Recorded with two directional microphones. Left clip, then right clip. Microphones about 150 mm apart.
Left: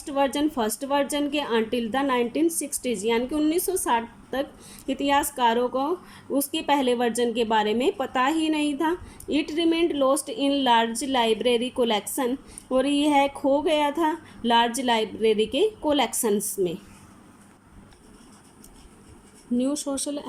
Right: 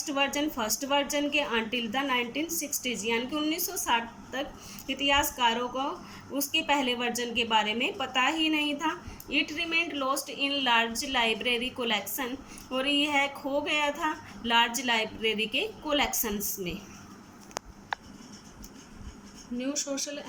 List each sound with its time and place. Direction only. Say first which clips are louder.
0.0 s a woman's voice: left 4 dB; 45° left (ahead or behind)